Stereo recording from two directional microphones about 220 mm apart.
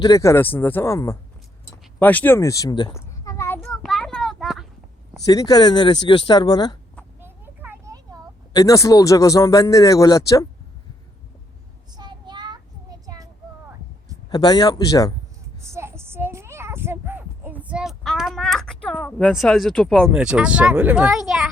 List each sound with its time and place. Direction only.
0.0 s speech: 15° left (ahead or behind)
1.7 s a sound: 10° left (ahead or behind)
5.2 s speech: 15° left (ahead or behind)
7.2 s children playing: 10° right (ahead or behind)
8.5 s speech: 15° left (ahead or behind)
11.9 s child singing: 20° right (ahead or behind)
14.3 s speech: 20° left (ahead or behind)
15.7 s a sound: 10° right (ahead or behind)